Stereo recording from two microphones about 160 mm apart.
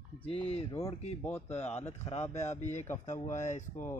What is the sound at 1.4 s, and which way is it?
A woman's voice, 40° left (ahead or behind).